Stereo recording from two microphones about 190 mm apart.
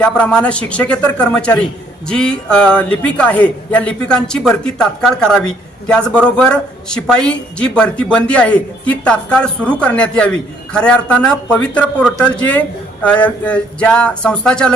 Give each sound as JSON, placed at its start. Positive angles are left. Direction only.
{"t": 0.0, "sound": "speech", "side_deg": 5}